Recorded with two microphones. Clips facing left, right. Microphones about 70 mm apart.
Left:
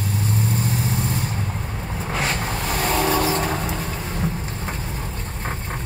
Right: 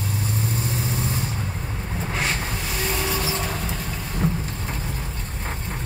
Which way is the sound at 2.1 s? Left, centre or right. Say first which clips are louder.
Left 3 dB; left.